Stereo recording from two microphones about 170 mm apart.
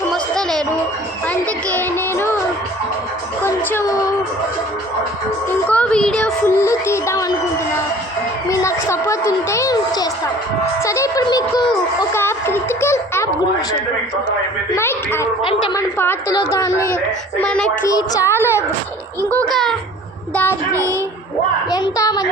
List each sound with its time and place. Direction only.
0.1 s music: centre (ahead or behind)
1.3 s speech: 10° left (ahead or behind)
3.4 s speech: 15° left (ahead or behind)
5.5 s speech: 10° left (ahead or behind)
8.4 s speech: 15° left (ahead or behind)
14.8 s a child's voice: 15° left (ahead or behind)
17.4 s speech: 5° left (ahead or behind)
17.8 s speech: 20° left (ahead or behind)
20.3 s speech: 10° left (ahead or behind)
21.7 s a child's voice: 20° left (ahead or behind)